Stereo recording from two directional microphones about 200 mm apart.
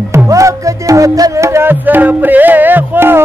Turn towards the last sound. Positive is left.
turn(degrees=-10)  # may be behind; listen again after turning